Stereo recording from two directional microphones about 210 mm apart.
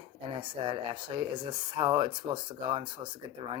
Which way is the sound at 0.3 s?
25° right (ahead or behind).